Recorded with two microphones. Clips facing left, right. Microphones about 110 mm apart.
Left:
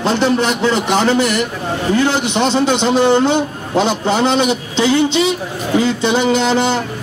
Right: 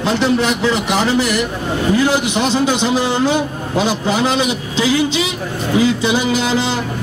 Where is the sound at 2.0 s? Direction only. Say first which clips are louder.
Even; 5° right (ahead or behind).